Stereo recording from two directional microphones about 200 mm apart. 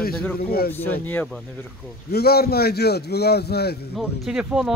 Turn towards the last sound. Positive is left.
turn(degrees=-5)  # may be behind; listen again after turning